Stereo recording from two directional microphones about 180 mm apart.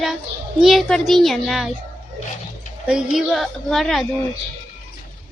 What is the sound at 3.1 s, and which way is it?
Speech, centre (ahead or behind).